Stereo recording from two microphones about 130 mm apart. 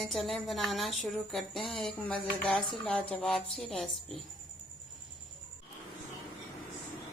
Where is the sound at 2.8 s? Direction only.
10° left (ahead or behind).